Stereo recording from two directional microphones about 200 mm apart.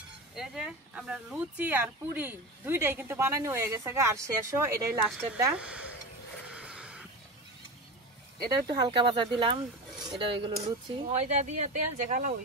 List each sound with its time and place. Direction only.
0.4 s speech: 5° right (ahead or behind)
6.5 s horse: 5° right (ahead or behind)
8.5 s speech: 20° right (ahead or behind)
9.5 s a sound: 20° right (ahead or behind)
10.2 s speech: 25° right (ahead or behind)
11.1 s speech: 35° right (ahead or behind)